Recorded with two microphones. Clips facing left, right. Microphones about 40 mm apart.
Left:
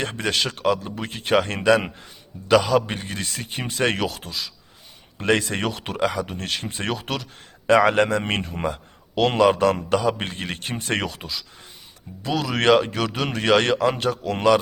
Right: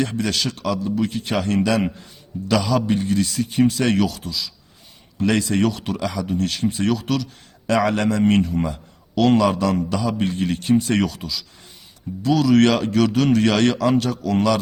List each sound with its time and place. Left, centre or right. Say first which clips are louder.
0.0 s speech: right 2 dB; left
12.2 s speech: right 6 dB; centre